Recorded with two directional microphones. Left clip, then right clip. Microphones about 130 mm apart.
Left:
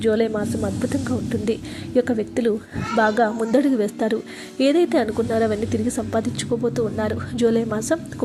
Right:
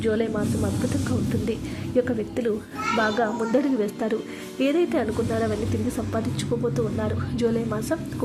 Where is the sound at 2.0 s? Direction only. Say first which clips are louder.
Left 4 dB; 25° left (ahead or behind).